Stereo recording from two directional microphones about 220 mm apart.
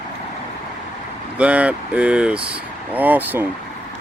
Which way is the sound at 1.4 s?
5° right (ahead or behind).